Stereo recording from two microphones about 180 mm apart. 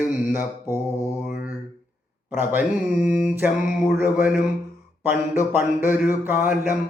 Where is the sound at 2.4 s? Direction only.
10° right (ahead or behind).